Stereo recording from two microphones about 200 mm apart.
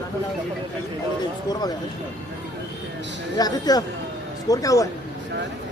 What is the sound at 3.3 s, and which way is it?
Speech, 20° left (ahead or behind).